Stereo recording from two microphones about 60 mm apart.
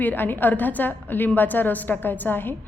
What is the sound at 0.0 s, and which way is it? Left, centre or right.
A woman's voice, left.